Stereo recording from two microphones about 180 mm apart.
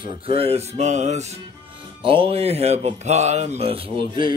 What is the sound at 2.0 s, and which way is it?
Speech, 30° right (ahead or behind).